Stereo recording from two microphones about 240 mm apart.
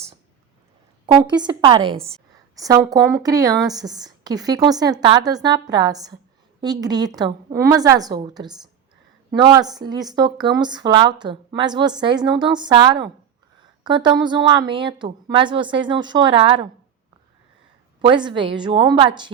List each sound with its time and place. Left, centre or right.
1.0 s speech: centre
18.0 s speech: centre